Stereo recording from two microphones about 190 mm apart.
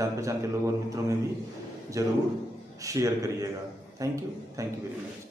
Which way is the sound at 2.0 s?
15° right (ahead or behind).